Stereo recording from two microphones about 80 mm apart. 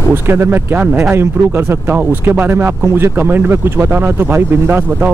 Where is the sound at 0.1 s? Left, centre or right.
Right.